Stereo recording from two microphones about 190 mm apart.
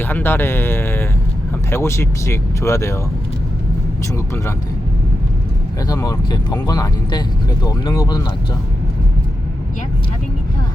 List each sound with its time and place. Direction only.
0.0 s speech: 10° left (ahead or behind)
5.9 s speech: 20° left (ahead or behind)